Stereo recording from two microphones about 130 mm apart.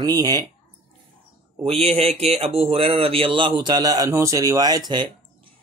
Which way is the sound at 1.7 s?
50° right (ahead or behind).